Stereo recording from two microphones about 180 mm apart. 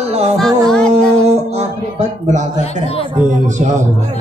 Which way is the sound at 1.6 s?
40° right (ahead or behind).